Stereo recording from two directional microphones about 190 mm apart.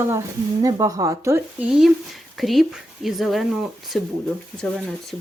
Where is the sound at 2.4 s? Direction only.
Centre (ahead or behind).